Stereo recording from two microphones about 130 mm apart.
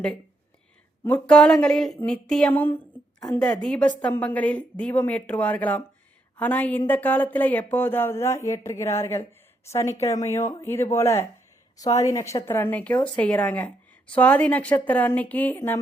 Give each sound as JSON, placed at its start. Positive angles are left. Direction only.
{"t": 1.0, "sound": "a woman's voice", "side_deg": 10}